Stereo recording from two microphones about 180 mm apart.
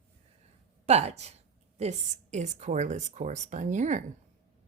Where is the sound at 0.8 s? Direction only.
35° right (ahead or behind).